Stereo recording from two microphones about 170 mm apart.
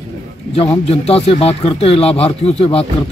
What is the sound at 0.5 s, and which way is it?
A man's voice, 35° left (ahead or behind).